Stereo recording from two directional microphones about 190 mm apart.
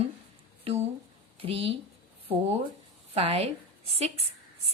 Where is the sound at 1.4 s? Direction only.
30° right (ahead or behind).